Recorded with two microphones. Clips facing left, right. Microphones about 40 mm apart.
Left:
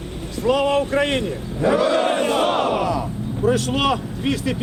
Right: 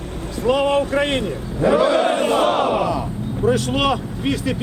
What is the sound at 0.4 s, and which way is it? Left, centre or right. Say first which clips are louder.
Speech: right 1 dB; centre.